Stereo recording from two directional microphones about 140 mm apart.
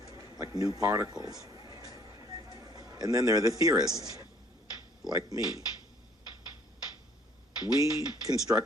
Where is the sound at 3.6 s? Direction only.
25° right (ahead or behind).